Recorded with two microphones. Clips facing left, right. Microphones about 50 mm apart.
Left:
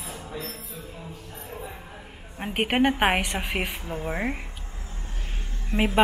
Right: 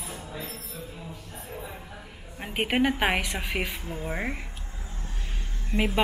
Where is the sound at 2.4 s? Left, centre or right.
Centre.